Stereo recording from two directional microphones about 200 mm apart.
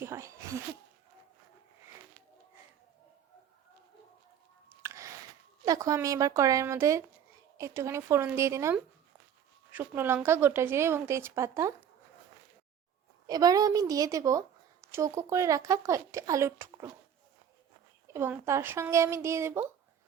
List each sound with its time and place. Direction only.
0.0 s speech: 15° right (ahead or behind)
4.8 s music: 15° right (ahead or behind)
5.6 s a woman's voice: 15° right (ahead or behind)
13.2 s a woman's voice: 20° right (ahead or behind)
18.1 s a woman's voice: 10° right (ahead or behind)